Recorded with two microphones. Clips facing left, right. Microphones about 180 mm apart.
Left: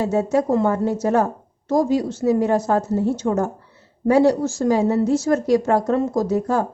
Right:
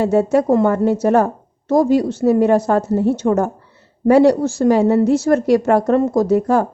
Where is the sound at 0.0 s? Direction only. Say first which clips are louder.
Right 4 dB; 65° right (ahead or behind).